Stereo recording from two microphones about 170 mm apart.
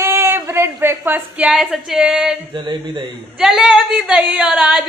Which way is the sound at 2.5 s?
25° right (ahead or behind).